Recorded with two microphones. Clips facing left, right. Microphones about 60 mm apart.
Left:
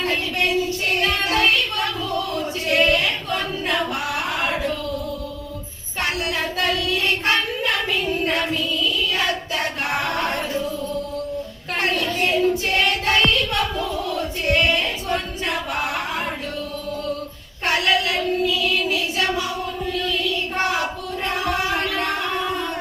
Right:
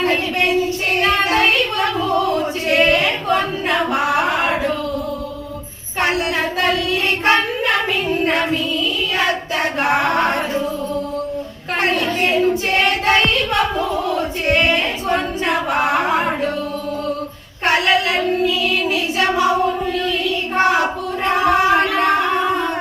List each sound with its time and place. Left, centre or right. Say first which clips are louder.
0.0 s child singing: right 5 dB; right
6.0 s child singing: right 5 dB; right
11.8 s child singing: right 4 dB; right
17.7 s child singing: right 4 dB; right
20.6 s singing: right 9 dB; right